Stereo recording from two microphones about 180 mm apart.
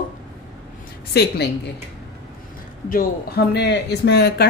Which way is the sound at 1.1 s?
65° left (ahead or behind).